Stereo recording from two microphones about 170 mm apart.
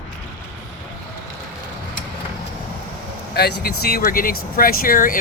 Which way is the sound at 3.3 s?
65° left (ahead or behind).